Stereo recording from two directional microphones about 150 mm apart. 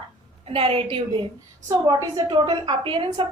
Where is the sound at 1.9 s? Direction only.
25° right (ahead or behind).